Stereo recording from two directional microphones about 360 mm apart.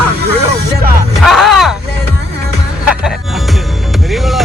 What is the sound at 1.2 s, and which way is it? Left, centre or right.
Vehicle, centre.